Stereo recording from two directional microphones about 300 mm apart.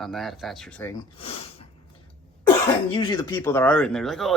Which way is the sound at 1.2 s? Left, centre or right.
Centre.